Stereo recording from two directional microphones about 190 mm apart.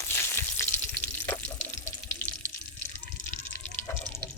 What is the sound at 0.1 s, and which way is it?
Frying, 15° left (ahead or behind).